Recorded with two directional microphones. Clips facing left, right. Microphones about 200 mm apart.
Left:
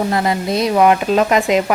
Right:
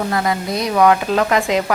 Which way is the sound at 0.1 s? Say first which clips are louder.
Left 2 dB; 25° left (ahead or behind).